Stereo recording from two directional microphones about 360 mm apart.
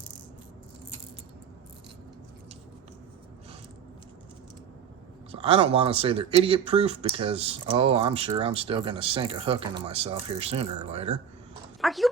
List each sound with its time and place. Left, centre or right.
5.3 s speech: centre
11.8 s dog: centre